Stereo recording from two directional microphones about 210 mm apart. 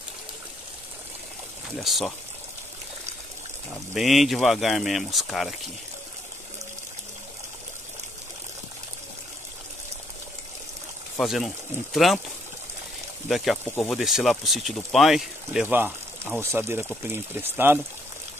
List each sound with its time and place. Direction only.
1.8 s speech: centre (ahead or behind)
3.9 s speech: centre (ahead or behind)
11.1 s speech: centre (ahead or behind)
13.3 s speech: centre (ahead or behind)